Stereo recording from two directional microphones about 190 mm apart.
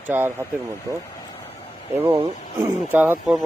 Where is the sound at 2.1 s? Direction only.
30° right (ahead or behind).